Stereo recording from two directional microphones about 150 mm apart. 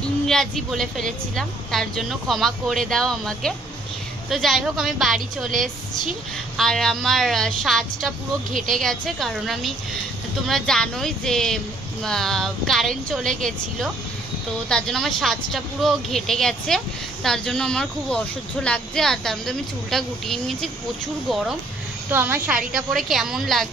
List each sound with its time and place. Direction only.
0.3 s speech: centre (ahead or behind)
6.5 s speech: 5° left (ahead or behind)
8.5 s a woman's voice: 60° right (ahead or behind)
8.7 s speech: 5° left (ahead or behind)
22.1 s a woman's voice: 15° right (ahead or behind)
22.8 s speech: centre (ahead or behind)